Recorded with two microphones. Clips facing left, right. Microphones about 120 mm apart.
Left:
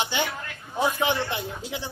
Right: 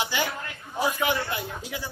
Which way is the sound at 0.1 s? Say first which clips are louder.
Even; 25° left (ahead or behind).